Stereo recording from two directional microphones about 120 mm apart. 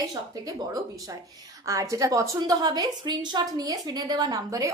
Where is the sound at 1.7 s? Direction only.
30° right (ahead or behind).